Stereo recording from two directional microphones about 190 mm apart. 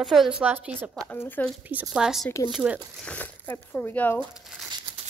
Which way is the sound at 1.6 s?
10° right (ahead or behind).